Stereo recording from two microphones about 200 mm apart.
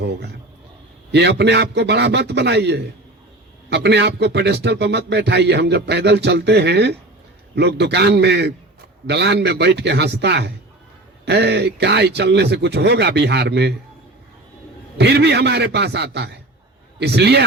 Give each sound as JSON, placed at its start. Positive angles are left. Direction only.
{"t": 0.0, "sound": "a sound", "side_deg": -55}
{"t": 1.1, "sound": "a man's voice", "side_deg": -60}
{"t": 14.9, "sound": "a man's voice", "side_deg": -55}